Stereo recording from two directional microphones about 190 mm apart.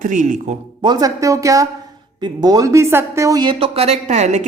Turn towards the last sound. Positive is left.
turn(degrees=-35)  # may be behind; listen again after turning